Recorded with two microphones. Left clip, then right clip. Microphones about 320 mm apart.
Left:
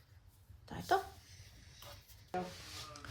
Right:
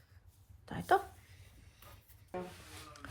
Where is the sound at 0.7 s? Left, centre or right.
Right.